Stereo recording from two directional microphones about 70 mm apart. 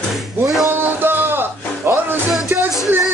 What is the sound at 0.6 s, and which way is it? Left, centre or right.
Music, right.